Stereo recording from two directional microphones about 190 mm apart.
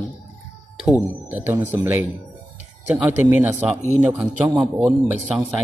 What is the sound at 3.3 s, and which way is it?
Speech, 10° right (ahead or behind).